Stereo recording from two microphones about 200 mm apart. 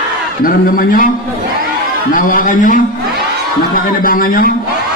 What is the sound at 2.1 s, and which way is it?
A man's voice, 45° left (ahead or behind).